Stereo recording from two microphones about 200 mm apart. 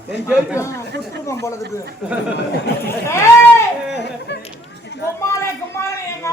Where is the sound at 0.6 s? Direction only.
15° left (ahead or behind).